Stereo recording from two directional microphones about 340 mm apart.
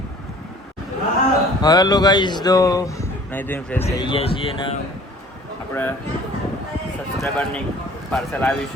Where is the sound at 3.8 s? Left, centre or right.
Centre.